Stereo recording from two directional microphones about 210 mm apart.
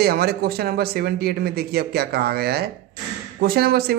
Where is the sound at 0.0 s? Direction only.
50° right (ahead or behind).